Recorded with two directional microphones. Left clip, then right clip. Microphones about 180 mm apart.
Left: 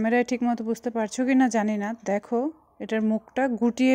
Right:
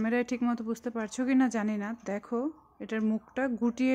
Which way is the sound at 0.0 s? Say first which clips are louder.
Left 6 dB; 20° left (ahead or behind).